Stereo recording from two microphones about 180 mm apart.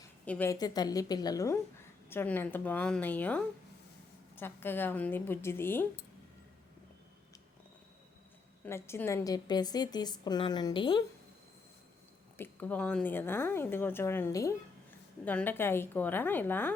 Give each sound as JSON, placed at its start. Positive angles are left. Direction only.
{"t": 0.3, "sound": "a woman's voice", "side_deg": 10}
{"t": 8.6, "sound": "a woman's voice", "side_deg": 10}
{"t": 12.4, "sound": "speech", "side_deg": 10}